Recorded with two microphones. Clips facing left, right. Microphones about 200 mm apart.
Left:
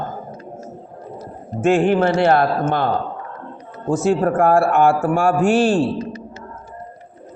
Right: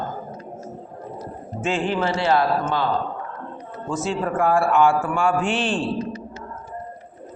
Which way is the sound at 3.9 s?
55° left (ahead or behind).